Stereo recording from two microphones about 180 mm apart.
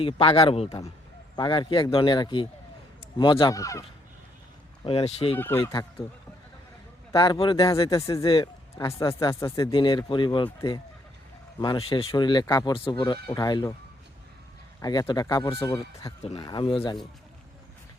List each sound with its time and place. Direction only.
0.0 s speech: 30° left (ahead or behind)
4.8 s speech: 30° left (ahead or behind)
5.4 s speech: 10° left (ahead or behind)
7.1 s speech: 25° left (ahead or behind)
8.9 s speech: 15° left (ahead or behind)
9.7 s speech: 25° left (ahead or behind)
14.8 s speech: 20° left (ahead or behind)